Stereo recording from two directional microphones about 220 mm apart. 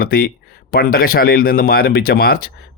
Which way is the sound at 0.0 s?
45° left (ahead or behind).